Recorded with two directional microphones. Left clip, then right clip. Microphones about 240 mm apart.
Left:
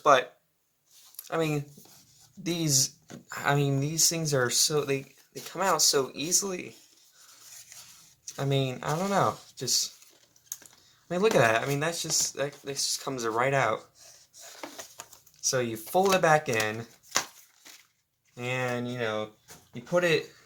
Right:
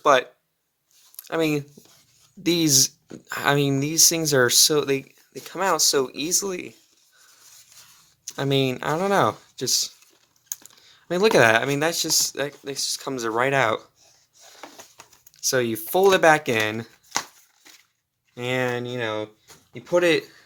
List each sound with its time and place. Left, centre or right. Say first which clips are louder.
0.0 s speech: right 3 dB; right
1.1 s a sound: right 6 dB; right
2.4 s speech: right 8 dB; right
8.4 s speech: right 7 dB; right
15.4 s speech: right 6 dB; right
18.3 s speech: right 6 dB; right